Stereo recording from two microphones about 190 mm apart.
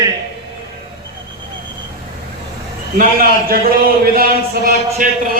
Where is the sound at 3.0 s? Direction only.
50° right (ahead or behind).